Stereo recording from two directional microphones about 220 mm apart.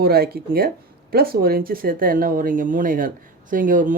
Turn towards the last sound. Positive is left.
turn(degrees=-35)  # may be behind; listen again after turning